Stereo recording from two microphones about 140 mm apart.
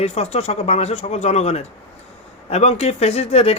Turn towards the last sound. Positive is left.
turn(degrees=45)  # may be behind; listen again after turning